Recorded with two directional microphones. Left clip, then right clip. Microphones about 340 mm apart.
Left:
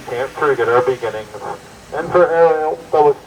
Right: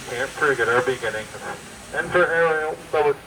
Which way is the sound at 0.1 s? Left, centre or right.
Centre.